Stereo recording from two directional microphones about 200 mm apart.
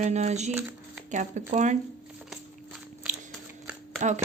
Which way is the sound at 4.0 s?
40° right (ahead or behind).